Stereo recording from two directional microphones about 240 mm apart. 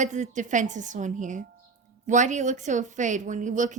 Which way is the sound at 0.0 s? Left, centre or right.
Right.